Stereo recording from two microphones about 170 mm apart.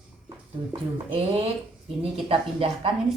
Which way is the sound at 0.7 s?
30° right (ahead or behind).